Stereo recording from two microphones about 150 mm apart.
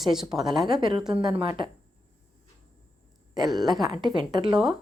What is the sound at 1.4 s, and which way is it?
Speech, 30° right (ahead or behind).